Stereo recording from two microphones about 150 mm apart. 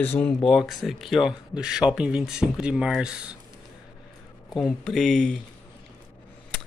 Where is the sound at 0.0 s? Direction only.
10° left (ahead or behind).